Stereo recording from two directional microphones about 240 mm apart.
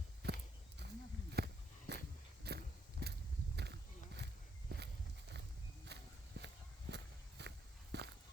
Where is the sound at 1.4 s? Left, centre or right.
Right.